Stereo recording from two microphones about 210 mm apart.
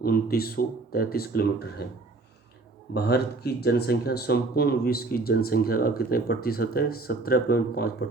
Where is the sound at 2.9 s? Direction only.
50° left (ahead or behind).